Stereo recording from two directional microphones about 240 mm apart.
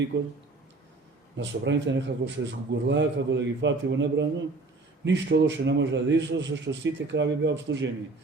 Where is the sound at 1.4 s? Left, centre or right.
Right.